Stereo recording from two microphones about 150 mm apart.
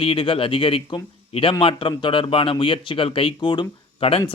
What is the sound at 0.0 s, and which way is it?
A man's voice, 35° left (ahead or behind).